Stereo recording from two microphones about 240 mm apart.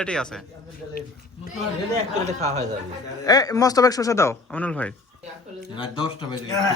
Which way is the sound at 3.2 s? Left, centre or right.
Centre.